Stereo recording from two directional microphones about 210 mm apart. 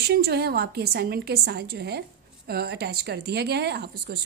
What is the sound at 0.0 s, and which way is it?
A woman's voice, 50° right (ahead or behind).